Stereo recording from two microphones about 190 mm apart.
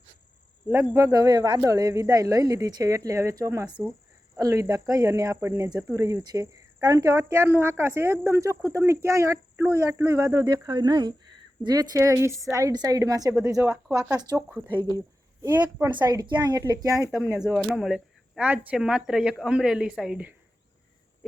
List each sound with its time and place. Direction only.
0.9 s a woman's voice: 15° right (ahead or behind)
13.8 s speech: centre (ahead or behind)
14.1 s a woman's voice: 20° right (ahead or behind)